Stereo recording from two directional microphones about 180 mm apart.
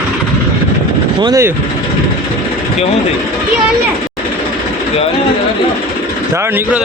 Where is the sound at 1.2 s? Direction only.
20° right (ahead or behind).